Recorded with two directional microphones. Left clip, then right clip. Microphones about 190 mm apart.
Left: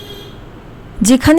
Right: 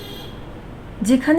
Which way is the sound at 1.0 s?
30° left (ahead or behind).